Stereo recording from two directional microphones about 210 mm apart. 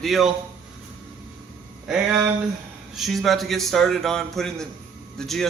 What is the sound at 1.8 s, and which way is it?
A man's voice, centre (ahead or behind).